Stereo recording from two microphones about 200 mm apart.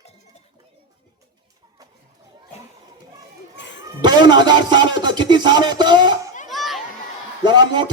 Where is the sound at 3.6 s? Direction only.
65° left (ahead or behind).